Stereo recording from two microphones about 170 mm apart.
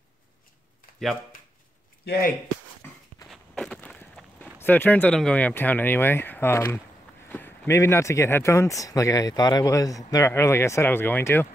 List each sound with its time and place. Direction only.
2.0 s speech: 65° left (ahead or behind)
3.3 s walk: centre (ahead or behind)
4.6 s a man's voice: 10° left (ahead or behind)